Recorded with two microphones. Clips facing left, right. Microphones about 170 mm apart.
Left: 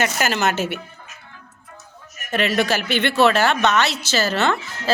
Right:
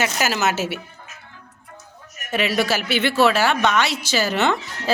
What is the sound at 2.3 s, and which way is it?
A woman's voice, 10° right (ahead or behind).